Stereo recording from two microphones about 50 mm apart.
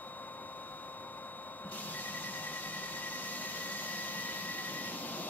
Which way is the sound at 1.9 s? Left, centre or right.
Left.